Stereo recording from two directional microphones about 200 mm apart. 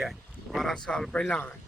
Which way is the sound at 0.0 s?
Centre (ahead or behind).